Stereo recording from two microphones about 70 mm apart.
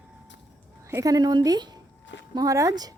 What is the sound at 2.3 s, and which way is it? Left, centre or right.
Speech, right.